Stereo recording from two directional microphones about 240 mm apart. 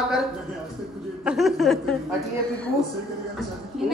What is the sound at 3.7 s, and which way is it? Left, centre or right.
Speech, centre.